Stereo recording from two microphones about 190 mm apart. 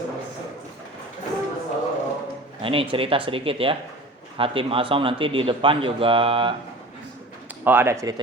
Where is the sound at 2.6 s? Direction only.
30° right (ahead or behind).